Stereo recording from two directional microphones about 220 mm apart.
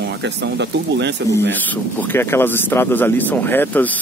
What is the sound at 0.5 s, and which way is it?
Speech, 50° right (ahead or behind).